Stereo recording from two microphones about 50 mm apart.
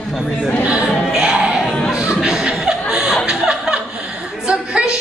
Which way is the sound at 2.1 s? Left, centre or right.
Centre.